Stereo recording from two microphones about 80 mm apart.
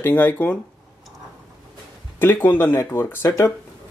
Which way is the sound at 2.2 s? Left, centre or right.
Left.